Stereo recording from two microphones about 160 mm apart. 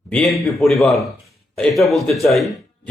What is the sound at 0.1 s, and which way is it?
A man's voice, 5° left (ahead or behind).